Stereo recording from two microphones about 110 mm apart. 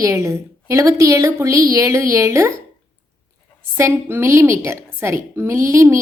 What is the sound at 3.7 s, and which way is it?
A woman's voice, 20° right (ahead or behind).